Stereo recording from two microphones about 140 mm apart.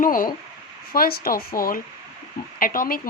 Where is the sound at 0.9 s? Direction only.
90° left.